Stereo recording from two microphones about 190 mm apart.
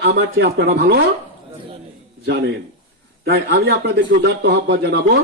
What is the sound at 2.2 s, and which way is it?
Speech, 60° right (ahead or behind).